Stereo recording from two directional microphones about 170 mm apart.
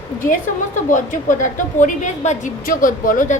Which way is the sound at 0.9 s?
50° left (ahead or behind).